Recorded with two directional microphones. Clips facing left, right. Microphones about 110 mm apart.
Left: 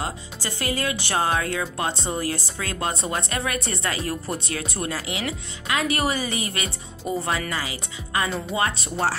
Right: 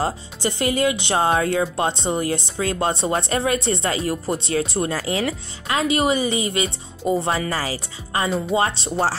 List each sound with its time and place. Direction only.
0.0 s speech: 25° right (ahead or behind)